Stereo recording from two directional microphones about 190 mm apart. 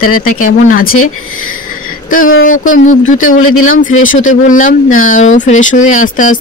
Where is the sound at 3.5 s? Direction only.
90° left.